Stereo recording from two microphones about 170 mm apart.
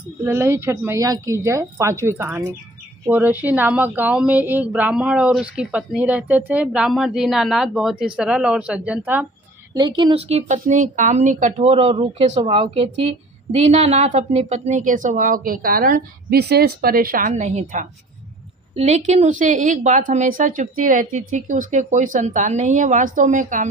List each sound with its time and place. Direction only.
0.3 s speech: 15° right (ahead or behind)
9.7 s speech: 25° right (ahead or behind); by 23.6 s 50° right (ahead or behind)